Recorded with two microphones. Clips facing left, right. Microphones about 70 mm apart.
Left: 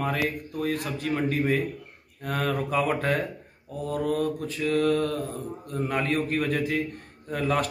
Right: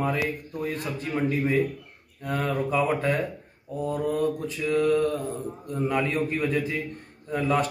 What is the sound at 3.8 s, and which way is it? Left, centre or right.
Speech, left.